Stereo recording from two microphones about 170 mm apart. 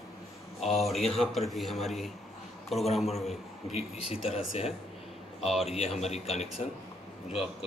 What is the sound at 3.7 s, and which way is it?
Speech, 35° left (ahead or behind).